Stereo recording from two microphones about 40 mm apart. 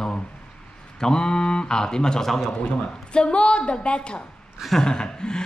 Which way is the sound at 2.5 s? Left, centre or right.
Left.